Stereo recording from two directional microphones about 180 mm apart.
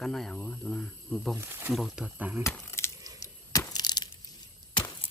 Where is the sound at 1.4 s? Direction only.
10° right (ahead or behind).